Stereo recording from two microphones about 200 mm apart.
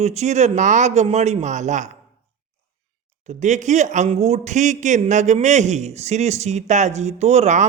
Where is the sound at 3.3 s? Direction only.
35° right (ahead or behind).